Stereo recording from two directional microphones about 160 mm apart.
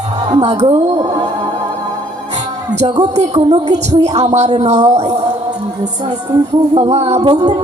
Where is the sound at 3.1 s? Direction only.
45° right (ahead or behind).